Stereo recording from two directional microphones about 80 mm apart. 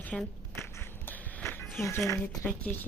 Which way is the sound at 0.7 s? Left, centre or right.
Left.